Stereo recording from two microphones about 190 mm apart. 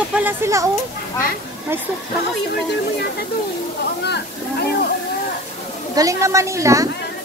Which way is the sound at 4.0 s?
60° left (ahead or behind).